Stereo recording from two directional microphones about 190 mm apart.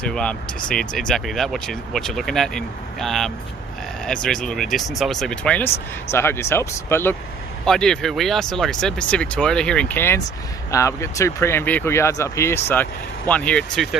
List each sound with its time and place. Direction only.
0.0 s speech: 5° left (ahead or behind)